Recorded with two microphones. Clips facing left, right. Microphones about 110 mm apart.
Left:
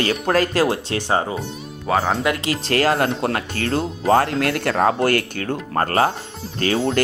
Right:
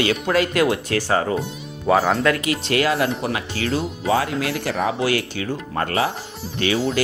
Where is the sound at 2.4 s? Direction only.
35° left (ahead or behind).